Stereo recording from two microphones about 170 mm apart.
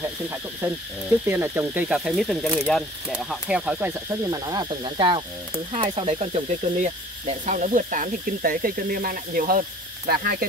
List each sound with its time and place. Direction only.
1.2 s speech: 10° right (ahead or behind); by 10.3 s 60° right (ahead or behind)